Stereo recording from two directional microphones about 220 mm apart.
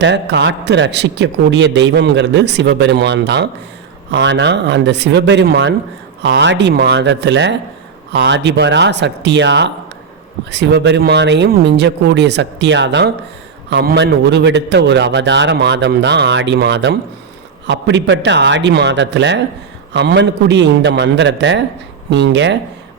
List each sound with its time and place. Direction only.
0.0 s a man's voice: 55° right (ahead or behind)